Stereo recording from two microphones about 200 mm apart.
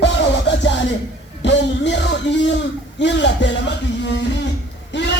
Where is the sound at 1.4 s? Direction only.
60° left (ahead or behind).